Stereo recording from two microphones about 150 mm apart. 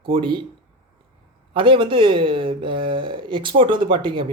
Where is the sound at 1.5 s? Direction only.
35° right (ahead or behind).